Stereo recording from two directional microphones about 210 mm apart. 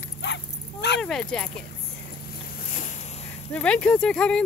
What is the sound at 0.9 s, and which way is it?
Speech, 5° left (ahead or behind).